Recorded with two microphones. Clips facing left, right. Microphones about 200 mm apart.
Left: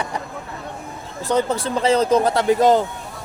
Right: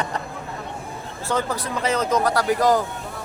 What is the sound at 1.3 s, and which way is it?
Speech, 20° left (ahead or behind).